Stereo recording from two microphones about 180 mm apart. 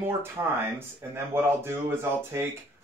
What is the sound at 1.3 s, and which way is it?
Speech, 15° right (ahead or behind).